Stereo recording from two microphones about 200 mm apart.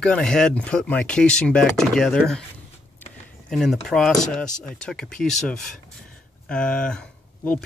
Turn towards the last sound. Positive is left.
turn(degrees=5)  # may be behind; listen again after turning